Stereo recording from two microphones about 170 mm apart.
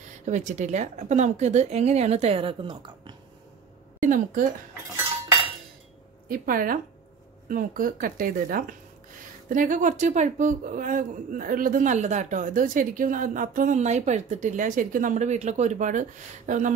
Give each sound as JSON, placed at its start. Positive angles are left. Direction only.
{"t": 0.2, "sound": "a woman's voice", "side_deg": -45}
{"t": 4.0, "sound": "a woman's voice", "side_deg": -50}
{"t": 6.2, "sound": "a woman's voice", "side_deg": -55}